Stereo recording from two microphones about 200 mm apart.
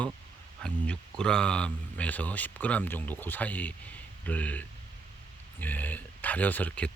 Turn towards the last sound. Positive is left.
turn(degrees=5)  # may be behind; listen again after turning